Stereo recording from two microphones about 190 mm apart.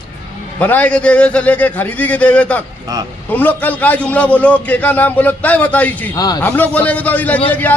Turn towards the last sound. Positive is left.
turn(degrees=10)  # may be behind; listen again after turning